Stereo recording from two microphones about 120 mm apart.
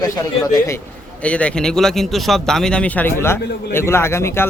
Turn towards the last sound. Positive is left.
turn(degrees=20)  # may be behind; listen again after turning